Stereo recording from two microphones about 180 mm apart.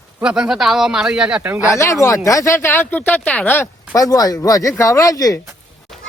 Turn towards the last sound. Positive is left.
turn(degrees=20)  # may be behind; listen again after turning